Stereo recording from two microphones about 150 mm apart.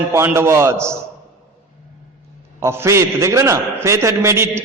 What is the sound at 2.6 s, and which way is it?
A man's voice, 15° right (ahead or behind).